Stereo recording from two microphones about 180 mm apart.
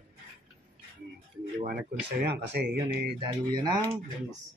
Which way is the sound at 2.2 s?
65° right (ahead or behind).